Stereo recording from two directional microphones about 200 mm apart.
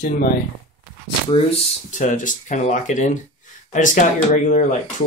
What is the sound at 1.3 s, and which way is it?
Speech, 35° left (ahead or behind).